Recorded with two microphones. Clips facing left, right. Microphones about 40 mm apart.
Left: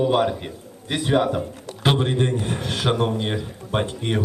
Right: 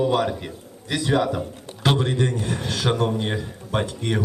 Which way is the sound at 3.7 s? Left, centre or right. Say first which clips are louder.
Left 1 dB; left.